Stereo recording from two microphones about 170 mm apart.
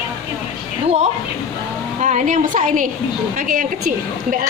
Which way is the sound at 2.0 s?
50° right (ahead or behind).